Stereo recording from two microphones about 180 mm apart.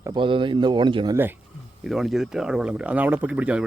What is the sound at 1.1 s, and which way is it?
Speech, 10° right (ahead or behind).